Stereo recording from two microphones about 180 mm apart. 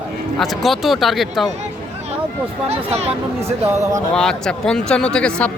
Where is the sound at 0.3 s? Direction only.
Centre (ahead or behind).